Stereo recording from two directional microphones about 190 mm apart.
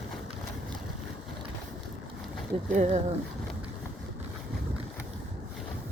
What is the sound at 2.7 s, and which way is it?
Speech, 40° right (ahead or behind).